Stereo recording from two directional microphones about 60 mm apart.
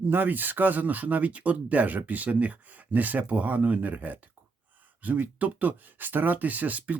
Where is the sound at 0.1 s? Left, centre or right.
Right.